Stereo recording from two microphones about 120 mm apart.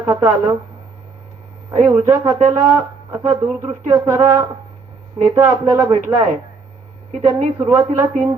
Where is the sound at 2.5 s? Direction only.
25° right (ahead or behind).